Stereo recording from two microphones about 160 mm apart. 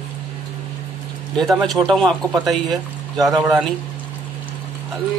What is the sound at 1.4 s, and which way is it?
Speech, centre (ahead or behind).